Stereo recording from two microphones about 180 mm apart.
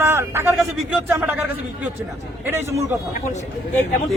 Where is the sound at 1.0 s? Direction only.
10° right (ahead or behind).